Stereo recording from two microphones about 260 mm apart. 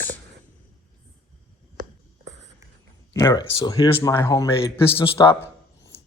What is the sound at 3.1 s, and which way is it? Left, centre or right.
A man's voice, centre.